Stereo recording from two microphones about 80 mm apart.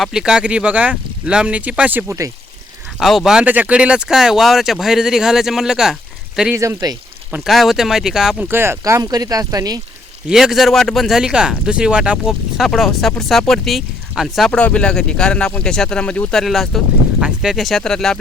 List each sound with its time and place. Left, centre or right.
0.0 s speech: centre; by 2.1 s right
3.0 s speech: centre
3.4 s speech: centre
6.5 s speech: right
7.4 s speech: centre
8.4 s speech: right
8.8 s speech: right
10.2 s speech: centre
12.3 s speech: centre
14.5 s speech: centre